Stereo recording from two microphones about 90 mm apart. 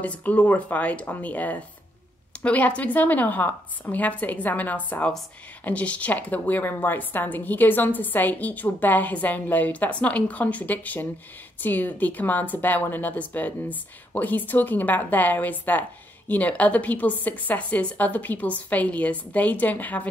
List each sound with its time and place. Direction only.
0.0 s a woman's voice: 15° left (ahead or behind)